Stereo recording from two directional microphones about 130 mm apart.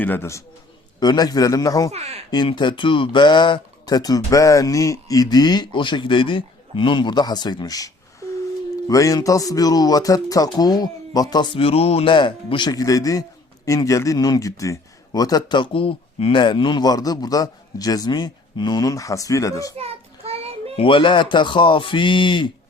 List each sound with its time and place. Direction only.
0.0 s speech: 15° left (ahead or behind)
0.9 s speech: 30° left (ahead or behind)
1.9 s speech: 55° right (ahead or behind)
2.3 s speech: 35° left (ahead or behind)
8.9 s speech: 25° left (ahead or behind)
19.7 s child singing: 50° right (ahead or behind)
20.7 s speech: 40° left (ahead or behind)